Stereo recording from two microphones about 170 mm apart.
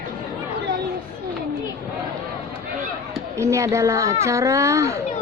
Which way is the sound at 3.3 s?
15° right (ahead or behind).